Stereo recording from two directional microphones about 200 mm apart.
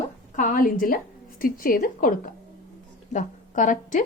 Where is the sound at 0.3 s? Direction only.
40° left (ahead or behind).